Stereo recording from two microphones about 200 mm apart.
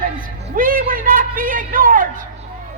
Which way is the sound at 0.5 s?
45° right (ahead or behind).